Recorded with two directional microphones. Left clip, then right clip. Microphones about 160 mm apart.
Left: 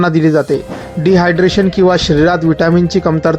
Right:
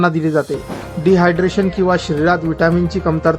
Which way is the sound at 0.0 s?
20° left (ahead or behind).